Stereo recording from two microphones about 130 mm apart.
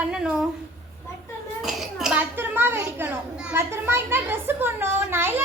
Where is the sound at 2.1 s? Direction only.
15° right (ahead or behind).